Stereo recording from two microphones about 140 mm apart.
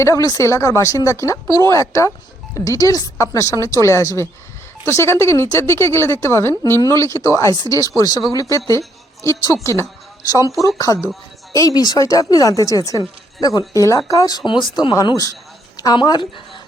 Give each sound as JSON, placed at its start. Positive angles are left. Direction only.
{"t": 0.0, "sound": "a woman's voice", "side_deg": 25}